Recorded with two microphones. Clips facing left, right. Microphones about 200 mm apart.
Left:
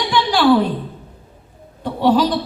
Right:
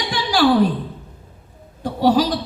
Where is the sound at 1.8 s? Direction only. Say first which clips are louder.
Left 1 dB; 55° left (ahead or behind).